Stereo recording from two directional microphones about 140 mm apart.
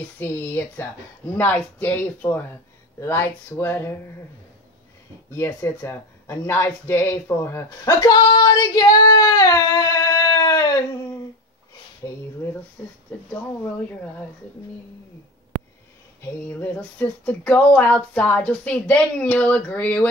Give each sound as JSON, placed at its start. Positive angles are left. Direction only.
{"t": 0.2, "sound": "speech", "side_deg": 15}
{"t": 5.3, "sound": "speech", "side_deg": 20}
{"t": 10.4, "sound": "a sound", "side_deg": 25}
{"t": 12.0, "sound": "speech", "side_deg": 20}
{"t": 12.8, "sound": "speech", "side_deg": 5}
{"t": 16.2, "sound": "speech", "side_deg": 15}